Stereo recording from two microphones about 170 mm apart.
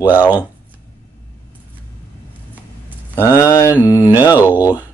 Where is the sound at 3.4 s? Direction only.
20° left (ahead or behind).